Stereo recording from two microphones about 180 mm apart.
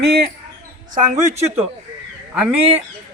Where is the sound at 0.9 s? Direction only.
45° right (ahead or behind).